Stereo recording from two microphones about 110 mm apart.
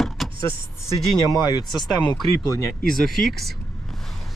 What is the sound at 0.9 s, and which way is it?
Speech, 5° left (ahead or behind).